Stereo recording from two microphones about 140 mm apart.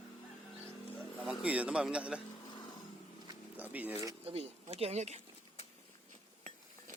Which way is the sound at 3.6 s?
10° right (ahead or behind).